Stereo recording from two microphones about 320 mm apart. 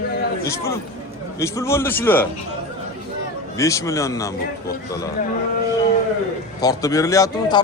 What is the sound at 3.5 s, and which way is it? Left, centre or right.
Speech, centre.